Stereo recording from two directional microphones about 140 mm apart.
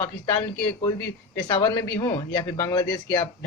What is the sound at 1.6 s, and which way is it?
A man's voice, 30° left (ahead or behind).